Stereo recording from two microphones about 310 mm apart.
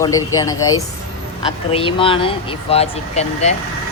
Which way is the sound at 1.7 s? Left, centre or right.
Centre.